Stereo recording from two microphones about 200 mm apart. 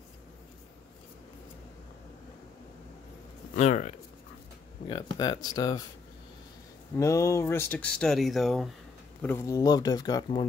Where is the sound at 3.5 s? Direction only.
35° left (ahead or behind).